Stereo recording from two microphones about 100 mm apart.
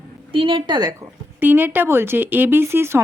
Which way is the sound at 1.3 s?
20° right (ahead or behind).